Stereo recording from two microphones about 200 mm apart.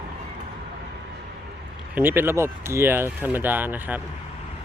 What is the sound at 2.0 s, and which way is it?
Speech, 10° right (ahead or behind).